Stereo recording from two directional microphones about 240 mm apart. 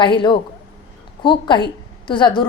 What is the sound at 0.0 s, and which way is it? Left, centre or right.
A woman's voice, centre.